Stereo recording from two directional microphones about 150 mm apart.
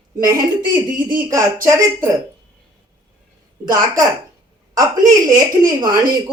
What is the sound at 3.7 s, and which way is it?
Speech, 20° right (ahead or behind).